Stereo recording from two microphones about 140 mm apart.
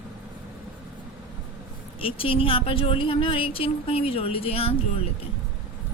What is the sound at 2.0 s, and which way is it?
A woman's voice, 40° left (ahead or behind).